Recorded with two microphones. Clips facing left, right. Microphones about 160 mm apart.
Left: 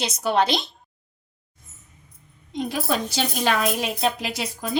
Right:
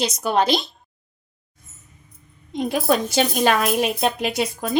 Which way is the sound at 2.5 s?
50° right (ahead or behind).